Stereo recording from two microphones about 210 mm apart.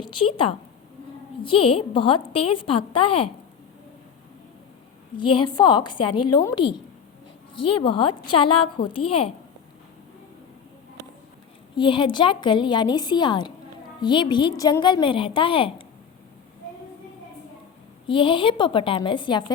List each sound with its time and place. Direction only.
0.0 s a woman's voice: 25° left (ahead or behind)
1.5 s a woman's voice: 25° left (ahead or behind)
5.1 s a woman's voice: 25° left (ahead or behind)
11.7 s a woman's voice: 25° left (ahead or behind)
18.0 s a woman's voice: 25° left (ahead or behind)